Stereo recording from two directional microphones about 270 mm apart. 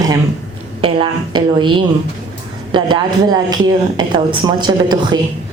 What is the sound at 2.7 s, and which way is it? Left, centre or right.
A woman's voice, centre.